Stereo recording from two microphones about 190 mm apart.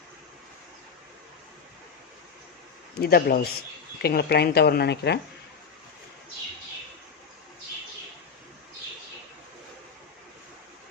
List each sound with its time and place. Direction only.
3.0 s a man's voice: 55° left (ahead or behind)